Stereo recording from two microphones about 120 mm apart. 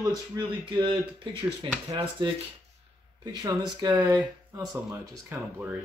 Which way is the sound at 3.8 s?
30° right (ahead or behind).